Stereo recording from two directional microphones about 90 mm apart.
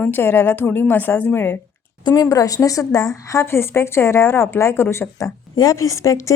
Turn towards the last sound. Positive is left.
turn(degrees=35)  # may be behind; listen again after turning